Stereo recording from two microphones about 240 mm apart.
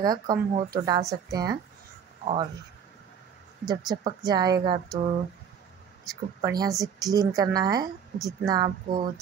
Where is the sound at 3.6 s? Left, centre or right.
Centre.